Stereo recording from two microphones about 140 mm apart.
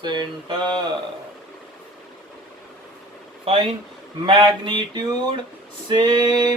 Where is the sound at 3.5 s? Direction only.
45° right (ahead or behind).